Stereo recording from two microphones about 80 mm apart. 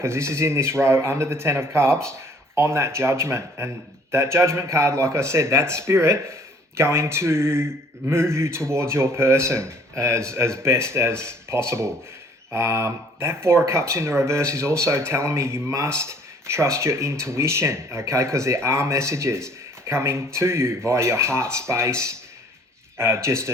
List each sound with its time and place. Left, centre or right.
0.0 s speech: right